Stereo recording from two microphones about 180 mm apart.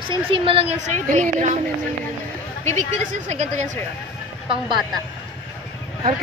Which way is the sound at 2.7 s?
40° right (ahead or behind).